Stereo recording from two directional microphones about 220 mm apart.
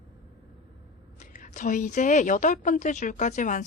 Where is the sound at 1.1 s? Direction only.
35° left (ahead or behind).